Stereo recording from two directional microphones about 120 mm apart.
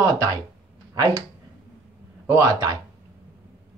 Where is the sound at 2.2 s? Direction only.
25° right (ahead or behind).